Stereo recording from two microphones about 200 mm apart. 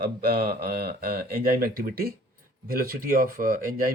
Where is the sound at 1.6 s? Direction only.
50° right (ahead or behind).